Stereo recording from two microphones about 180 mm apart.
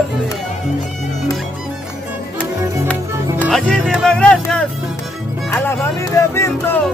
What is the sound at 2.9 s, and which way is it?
Speech, 5° left (ahead or behind).